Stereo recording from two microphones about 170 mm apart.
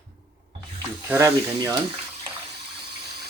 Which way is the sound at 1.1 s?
15° right (ahead or behind).